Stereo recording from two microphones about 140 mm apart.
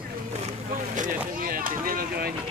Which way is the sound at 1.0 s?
80° right.